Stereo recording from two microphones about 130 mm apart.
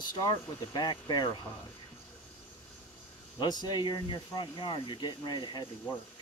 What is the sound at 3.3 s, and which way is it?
Speech, 35° left (ahead or behind).